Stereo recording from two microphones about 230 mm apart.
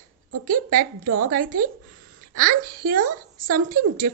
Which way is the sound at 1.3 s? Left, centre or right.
Right.